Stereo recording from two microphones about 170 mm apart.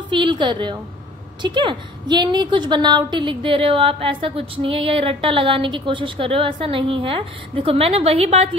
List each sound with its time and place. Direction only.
0.1 s a woman's voice: 30° right (ahead or behind)